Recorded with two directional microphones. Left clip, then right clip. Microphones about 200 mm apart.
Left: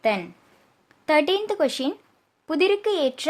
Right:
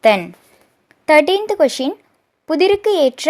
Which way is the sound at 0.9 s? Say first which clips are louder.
Right 8 dB; 25° right (ahead or behind).